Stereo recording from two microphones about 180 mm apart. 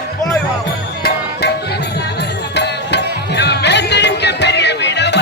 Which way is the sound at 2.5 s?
70° left (ahead or behind).